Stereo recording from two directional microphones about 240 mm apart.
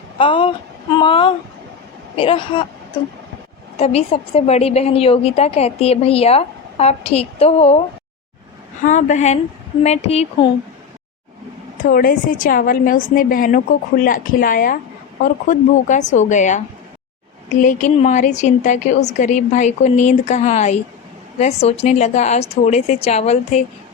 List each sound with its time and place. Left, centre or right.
0.2 s a woman's voice: left
3.8 s a woman's voice: left
8.8 s a woman's voice: left
11.8 s a woman's voice: left